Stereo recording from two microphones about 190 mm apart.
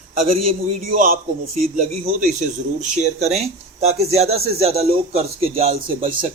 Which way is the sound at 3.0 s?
35° right (ahead or behind).